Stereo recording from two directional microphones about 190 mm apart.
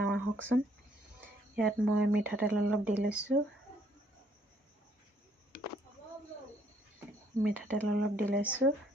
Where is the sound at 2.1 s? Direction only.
10° right (ahead or behind).